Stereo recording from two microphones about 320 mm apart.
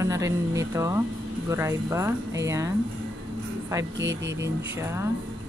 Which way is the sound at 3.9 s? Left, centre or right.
Right.